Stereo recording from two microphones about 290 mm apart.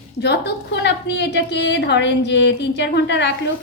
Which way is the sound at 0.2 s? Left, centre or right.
Left.